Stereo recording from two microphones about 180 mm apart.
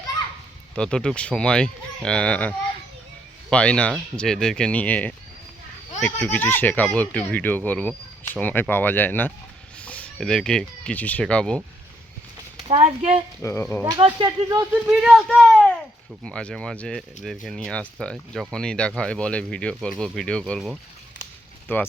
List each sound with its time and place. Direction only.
0.8 s speech: 5° left (ahead or behind)
12.5 s speech: 30° right (ahead or behind)
13.4 s speech: 15° left (ahead or behind)
14.3 s speech: 20° right (ahead or behind)
14.8 s speech: centre (ahead or behind)
21.7 s speech: 10° left (ahead or behind)